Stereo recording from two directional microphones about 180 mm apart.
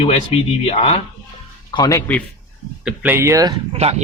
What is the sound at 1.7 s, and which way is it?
Speech, 20° left (ahead or behind).